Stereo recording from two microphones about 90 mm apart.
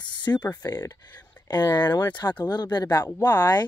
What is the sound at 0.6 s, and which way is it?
Speech, 40° left (ahead or behind).